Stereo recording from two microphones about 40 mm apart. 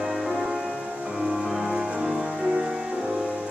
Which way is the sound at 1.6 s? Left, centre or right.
Centre.